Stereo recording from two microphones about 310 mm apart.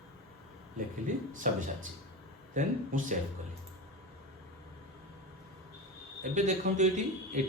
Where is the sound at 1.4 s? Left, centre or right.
Right.